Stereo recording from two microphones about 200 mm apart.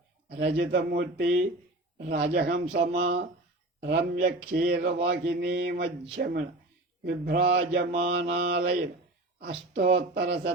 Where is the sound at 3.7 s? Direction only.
55° right (ahead or behind).